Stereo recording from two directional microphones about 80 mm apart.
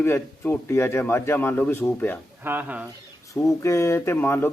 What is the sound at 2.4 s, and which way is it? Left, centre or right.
Speech, right.